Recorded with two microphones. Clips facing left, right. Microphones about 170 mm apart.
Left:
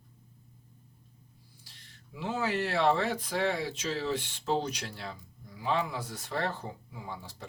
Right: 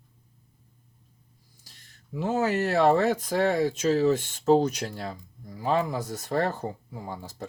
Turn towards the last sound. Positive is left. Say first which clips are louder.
# right 5 dB
turn(degrees=-45)  # may be behind; listen again after turning